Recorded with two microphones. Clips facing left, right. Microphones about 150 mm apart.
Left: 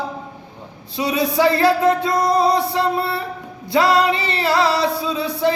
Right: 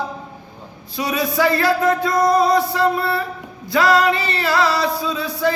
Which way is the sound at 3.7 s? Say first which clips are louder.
Even; 25° left (ahead or behind).